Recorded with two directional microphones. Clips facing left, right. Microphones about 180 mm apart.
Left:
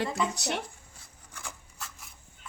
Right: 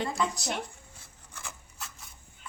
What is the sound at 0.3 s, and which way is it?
Speech, 65° left (ahead or behind).